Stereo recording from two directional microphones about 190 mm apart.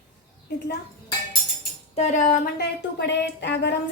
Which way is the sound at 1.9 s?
40° left (ahead or behind).